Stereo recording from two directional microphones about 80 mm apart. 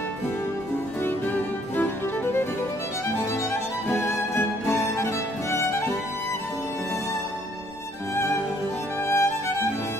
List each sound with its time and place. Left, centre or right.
1.0 s music: left
3.9 s music: left
9.0 s music: left